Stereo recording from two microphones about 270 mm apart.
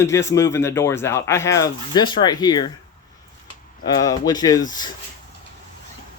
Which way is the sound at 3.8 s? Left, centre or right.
Centre.